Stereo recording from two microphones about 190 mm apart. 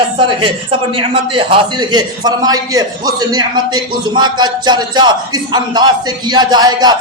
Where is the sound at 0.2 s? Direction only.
25° right (ahead or behind).